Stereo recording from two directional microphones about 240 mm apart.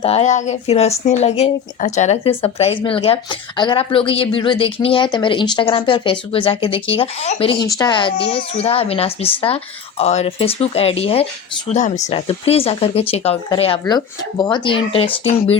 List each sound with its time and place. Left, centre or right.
0.0 s speech: left